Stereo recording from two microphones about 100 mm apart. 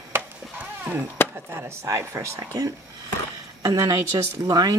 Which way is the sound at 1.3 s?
25° right (ahead or behind).